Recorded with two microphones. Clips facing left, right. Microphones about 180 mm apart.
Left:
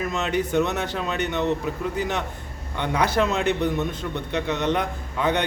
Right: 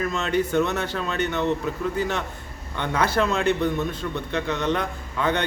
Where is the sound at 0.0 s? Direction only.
15° left (ahead or behind).